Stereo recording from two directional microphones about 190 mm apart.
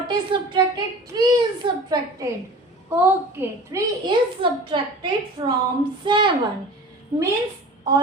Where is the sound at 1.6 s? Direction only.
20° right (ahead or behind).